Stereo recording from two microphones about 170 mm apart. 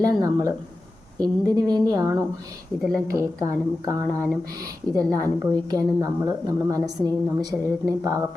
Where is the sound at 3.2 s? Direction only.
20° right (ahead or behind).